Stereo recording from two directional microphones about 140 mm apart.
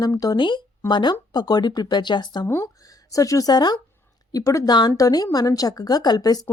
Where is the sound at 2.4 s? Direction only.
20° left (ahead or behind).